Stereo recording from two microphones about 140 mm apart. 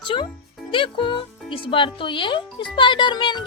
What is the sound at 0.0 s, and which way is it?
A child's voice, 35° left (ahead or behind).